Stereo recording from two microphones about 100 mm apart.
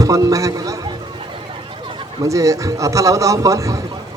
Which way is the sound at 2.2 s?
35° right (ahead or behind).